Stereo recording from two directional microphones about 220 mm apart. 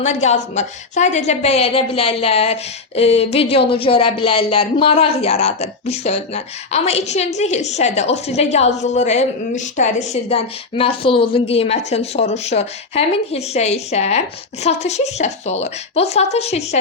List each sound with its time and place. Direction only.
0.0 s a woman's voice: 30° left (ahead or behind)